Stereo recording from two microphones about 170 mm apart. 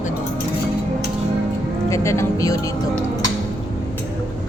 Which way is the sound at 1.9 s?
15° left (ahead or behind).